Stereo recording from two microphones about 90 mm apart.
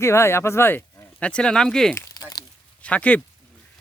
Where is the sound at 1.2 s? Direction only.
10° left (ahead or behind).